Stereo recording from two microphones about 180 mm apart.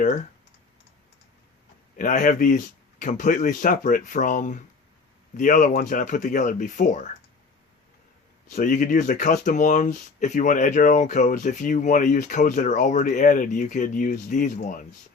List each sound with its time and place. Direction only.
2.0 s speech: 45° left (ahead or behind)
8.5 s speech: 45° left (ahead or behind)